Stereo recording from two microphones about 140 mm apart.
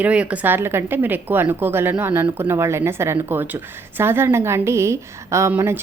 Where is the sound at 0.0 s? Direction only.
10° right (ahead or behind).